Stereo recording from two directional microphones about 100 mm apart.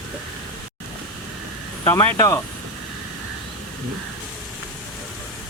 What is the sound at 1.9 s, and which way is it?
Speech, 25° left (ahead or behind).